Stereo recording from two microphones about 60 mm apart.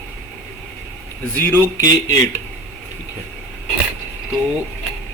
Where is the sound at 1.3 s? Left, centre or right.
Left.